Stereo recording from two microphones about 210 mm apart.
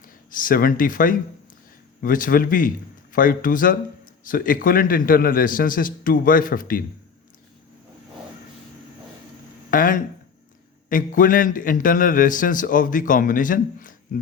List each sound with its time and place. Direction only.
0.0 s a man's voice: 40° left (ahead or behind)
9.6 s a man's voice: 40° left (ahead or behind)